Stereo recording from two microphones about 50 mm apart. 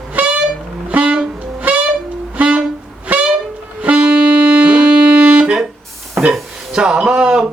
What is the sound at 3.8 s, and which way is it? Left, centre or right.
Music, right.